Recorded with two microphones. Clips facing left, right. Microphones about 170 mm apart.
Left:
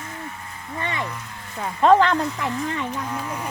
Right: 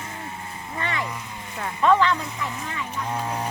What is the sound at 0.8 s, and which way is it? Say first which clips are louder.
Speech: left 1 dB; 20° left (ahead or behind).